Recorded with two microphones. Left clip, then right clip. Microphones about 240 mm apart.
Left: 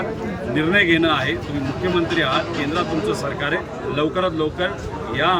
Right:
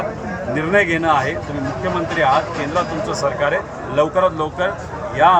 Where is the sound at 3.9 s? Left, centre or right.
Centre.